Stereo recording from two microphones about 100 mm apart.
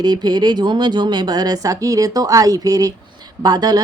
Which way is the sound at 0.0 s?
45° right (ahead or behind).